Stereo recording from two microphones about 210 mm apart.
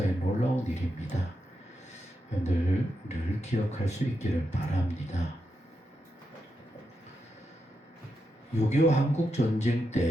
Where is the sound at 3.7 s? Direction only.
30° left (ahead or behind).